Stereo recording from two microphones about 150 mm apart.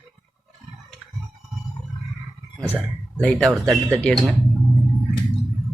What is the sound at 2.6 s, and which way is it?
Speech, 15° right (ahead or behind).